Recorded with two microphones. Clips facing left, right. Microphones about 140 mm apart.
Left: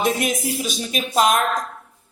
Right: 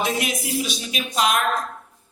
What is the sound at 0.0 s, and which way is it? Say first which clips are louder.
Speech: left 3 dB; 45° left (ahead or behind).